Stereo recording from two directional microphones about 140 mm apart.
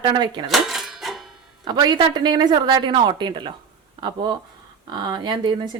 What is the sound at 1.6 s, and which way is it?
Speech, 30° right (ahead or behind).